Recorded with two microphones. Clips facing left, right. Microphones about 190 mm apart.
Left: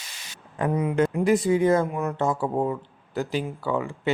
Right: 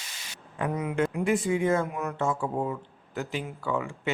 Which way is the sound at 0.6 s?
35° left (ahead or behind).